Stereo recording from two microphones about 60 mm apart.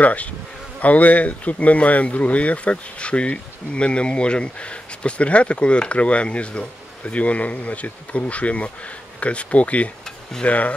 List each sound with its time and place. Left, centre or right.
0.0 s speech: left